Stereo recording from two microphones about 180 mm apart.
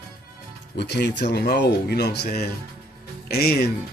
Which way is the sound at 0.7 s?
65° left (ahead or behind).